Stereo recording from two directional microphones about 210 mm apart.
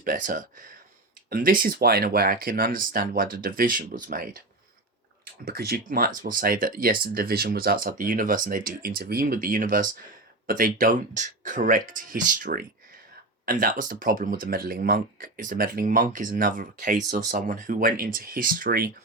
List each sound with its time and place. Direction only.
0.0 s speech: 40° right (ahead or behind)
5.5 s speech: 45° right (ahead or behind)